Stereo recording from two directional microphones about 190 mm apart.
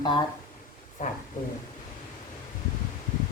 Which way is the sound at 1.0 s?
40° left (ahead or behind).